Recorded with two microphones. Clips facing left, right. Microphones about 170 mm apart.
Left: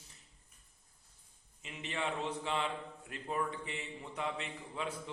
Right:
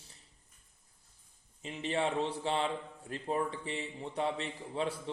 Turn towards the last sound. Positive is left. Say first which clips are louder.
# right 5 dB
turn(degrees=-30)  # may be behind; listen again after turning